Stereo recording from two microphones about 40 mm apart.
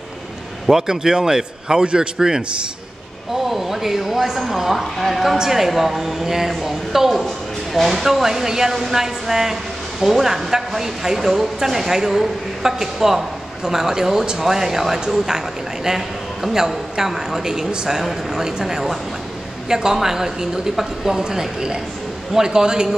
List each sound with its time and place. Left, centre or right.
0.7 s speech: centre
4.9 s speech: centre
5.4 s speech: centre
7.2 s a sound: centre
8.0 s speech: centre